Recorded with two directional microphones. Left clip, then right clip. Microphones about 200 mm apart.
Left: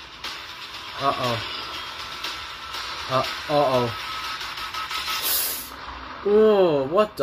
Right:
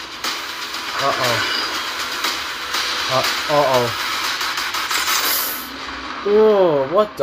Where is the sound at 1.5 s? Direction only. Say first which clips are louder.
Right 10 dB; 25° right (ahead or behind).